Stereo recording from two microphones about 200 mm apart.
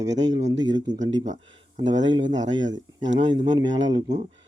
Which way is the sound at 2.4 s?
70° right (ahead or behind).